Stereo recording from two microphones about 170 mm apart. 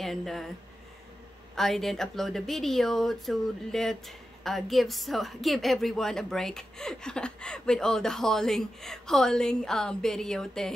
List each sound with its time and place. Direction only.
0.0 s speech: centre (ahead or behind)
1.5 s speech: centre (ahead or behind)